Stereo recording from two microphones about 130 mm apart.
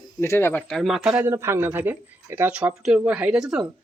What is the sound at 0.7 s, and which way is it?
Speech, centre (ahead or behind).